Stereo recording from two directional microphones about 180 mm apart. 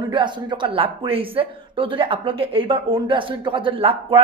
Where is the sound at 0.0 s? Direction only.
25° right (ahead or behind).